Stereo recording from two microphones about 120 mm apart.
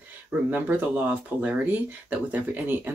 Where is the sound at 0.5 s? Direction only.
15° right (ahead or behind).